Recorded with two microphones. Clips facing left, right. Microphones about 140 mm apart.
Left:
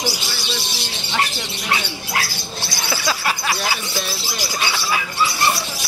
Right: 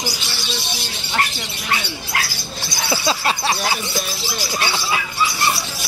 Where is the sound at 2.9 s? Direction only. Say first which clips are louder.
Right 3 dB; 25° right (ahead or behind).